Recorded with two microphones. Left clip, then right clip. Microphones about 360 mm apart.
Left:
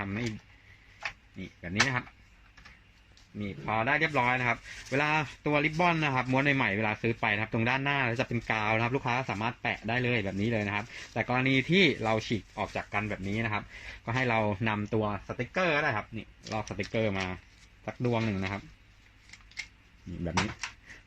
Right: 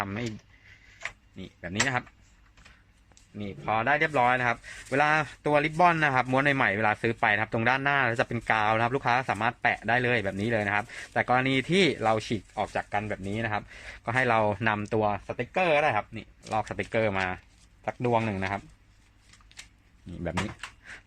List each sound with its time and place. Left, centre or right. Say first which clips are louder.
0.0 s a sound: right 3 dB; right
1.6 s speech: right 1 dB; right
3.4 s speech: right 3 dB; right